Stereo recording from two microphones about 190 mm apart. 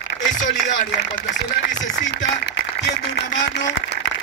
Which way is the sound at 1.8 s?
65° left (ahead or behind).